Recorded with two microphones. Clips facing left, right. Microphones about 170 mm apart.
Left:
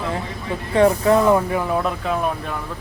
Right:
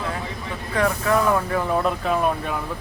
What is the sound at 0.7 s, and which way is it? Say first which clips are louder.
Speech: left 6 dB; 30° left (ahead or behind).